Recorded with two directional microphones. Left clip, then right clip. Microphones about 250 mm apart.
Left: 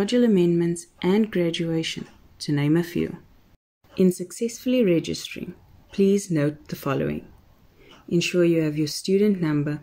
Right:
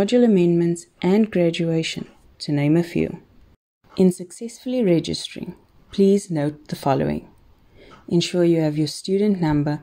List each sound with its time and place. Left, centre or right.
0.0 s speech: centre